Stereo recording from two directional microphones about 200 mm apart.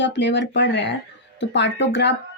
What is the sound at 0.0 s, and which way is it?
A woman's voice, 60° left (ahead or behind).